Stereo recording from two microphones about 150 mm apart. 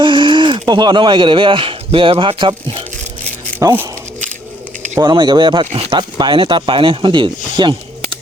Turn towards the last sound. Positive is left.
turn(degrees=-35)  # may be behind; listen again after turning